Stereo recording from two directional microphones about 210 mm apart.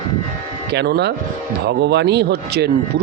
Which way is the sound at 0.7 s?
50° right (ahead or behind).